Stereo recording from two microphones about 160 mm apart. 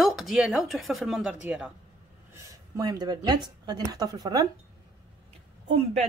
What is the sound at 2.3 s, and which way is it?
A woman's voice, 20° right (ahead or behind).